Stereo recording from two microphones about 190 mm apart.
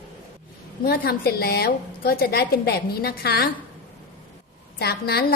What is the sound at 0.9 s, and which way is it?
A woman's voice, 55° left (ahead or behind).